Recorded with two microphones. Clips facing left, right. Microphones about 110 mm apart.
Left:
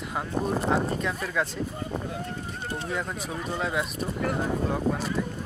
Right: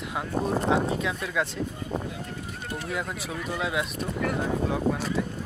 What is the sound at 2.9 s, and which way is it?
Speech, 5° right (ahead or behind).